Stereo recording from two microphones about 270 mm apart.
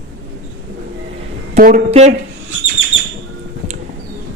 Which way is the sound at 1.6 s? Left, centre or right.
Right.